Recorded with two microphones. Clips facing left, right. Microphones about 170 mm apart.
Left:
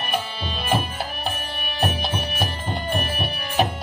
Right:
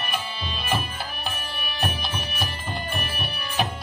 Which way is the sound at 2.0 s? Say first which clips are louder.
Left 5 dB; 60° left (ahead or behind).